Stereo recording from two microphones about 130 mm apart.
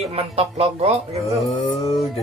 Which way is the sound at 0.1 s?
50° right (ahead or behind).